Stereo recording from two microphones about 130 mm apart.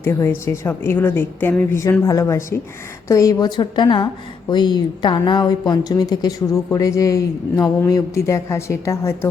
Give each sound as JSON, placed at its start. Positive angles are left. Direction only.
{"t": 0.0, "sound": "a woman's voice", "side_deg": 20}